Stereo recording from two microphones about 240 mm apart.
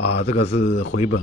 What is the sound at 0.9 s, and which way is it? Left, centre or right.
Speech, left.